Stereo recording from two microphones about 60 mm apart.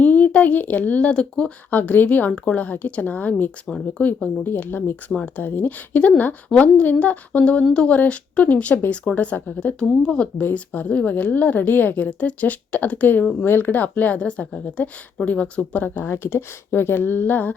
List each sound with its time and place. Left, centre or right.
0.0 s a woman's voice: left
2.3 s a woman's voice: centre
9.6 s a woman's voice: centre
16.0 s speech: left